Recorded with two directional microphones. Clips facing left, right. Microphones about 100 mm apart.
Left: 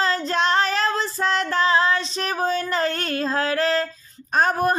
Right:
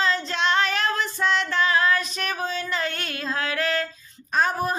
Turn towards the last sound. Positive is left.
turn(degrees=50)  # may be behind; listen again after turning